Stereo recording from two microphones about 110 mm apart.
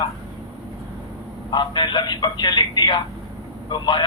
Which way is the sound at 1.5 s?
40° left (ahead or behind).